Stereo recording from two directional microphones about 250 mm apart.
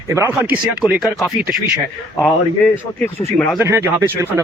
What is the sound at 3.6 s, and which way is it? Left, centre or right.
Speech, centre.